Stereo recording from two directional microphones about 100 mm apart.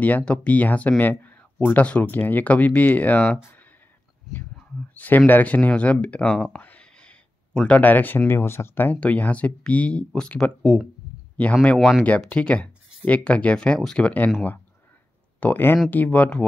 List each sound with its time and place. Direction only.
0.0 s speech: 15° left (ahead or behind)
4.3 s whispering: centre (ahead or behind)
4.9 s speech: 15° left (ahead or behind)
15.4 s speech: 20° left (ahead or behind)